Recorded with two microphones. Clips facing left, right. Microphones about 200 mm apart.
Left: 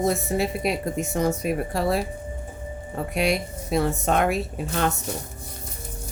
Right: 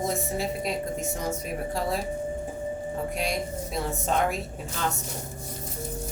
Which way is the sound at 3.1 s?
70° left (ahead or behind).